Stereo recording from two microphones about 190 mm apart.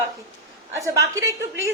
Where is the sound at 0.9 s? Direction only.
15° right (ahead or behind).